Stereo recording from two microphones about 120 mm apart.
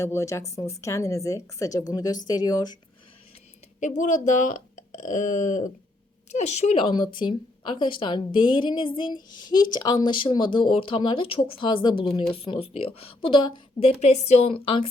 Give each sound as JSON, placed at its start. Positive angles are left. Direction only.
{"t": 0.0, "sound": "a woman's voice", "side_deg": 25}
{"t": 3.8, "sound": "speech", "side_deg": 90}
{"t": 6.3, "sound": "a woman's voice", "side_deg": 65}
{"t": 14.5, "sound": "a woman's voice", "side_deg": 45}